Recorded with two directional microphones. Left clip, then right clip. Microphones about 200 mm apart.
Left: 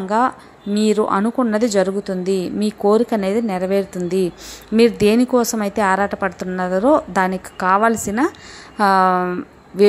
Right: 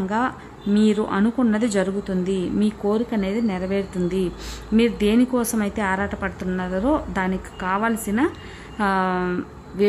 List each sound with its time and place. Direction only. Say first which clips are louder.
0.7 s a woman's voice: left 5 dB; 20° left (ahead or behind)